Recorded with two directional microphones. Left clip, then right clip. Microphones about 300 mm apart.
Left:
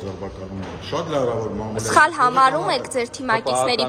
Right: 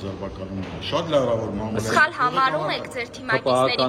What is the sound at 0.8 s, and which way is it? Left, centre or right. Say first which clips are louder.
A woman's voice: right 1 dB; centre.